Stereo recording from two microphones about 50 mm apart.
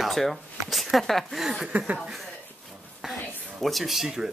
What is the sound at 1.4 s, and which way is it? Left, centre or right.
Speech, centre.